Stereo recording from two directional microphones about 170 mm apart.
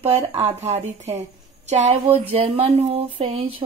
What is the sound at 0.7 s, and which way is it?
Speech, 40° right (ahead or behind).